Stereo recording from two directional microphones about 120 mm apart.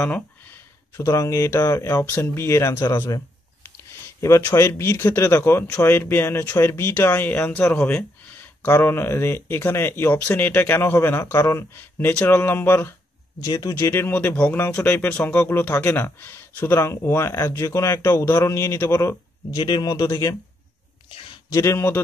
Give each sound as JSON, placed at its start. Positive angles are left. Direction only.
{"t": 0.9, "sound": "speech", "side_deg": 25}
{"t": 2.0, "sound": "speech", "side_deg": 20}
{"t": 4.2, "sound": "speech", "side_deg": 25}
{"t": 13.4, "sound": "speech", "side_deg": 30}
{"t": 20.1, "sound": "speech", "side_deg": 25}
{"t": 21.5, "sound": "speech", "side_deg": 20}